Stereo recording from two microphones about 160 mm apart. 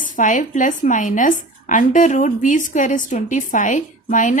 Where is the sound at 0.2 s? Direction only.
55° left (ahead or behind).